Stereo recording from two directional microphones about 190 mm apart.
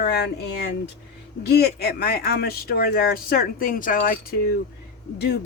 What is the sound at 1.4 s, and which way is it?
Speech, 55° left (ahead or behind).